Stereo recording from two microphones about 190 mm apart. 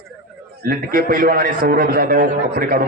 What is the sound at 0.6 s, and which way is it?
A man's voice, 50° right (ahead or behind).